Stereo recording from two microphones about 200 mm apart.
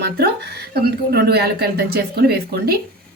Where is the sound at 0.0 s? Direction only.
55° right (ahead or behind).